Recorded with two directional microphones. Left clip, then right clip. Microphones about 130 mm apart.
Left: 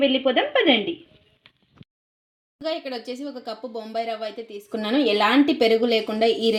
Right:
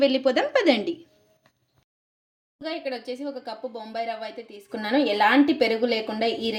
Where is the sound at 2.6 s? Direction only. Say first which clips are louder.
Left 3 dB; 55° left (ahead or behind).